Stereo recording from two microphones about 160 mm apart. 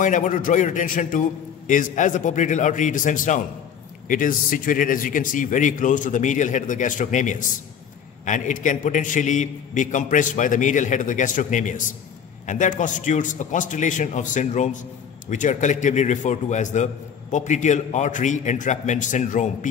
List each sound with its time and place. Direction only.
0.0 s a man's voice: 50° left (ahead or behind)